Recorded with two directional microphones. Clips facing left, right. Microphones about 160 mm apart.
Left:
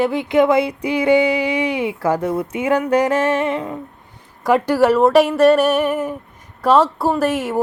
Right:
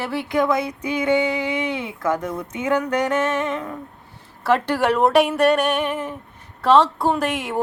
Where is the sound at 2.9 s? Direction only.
30° left (ahead or behind).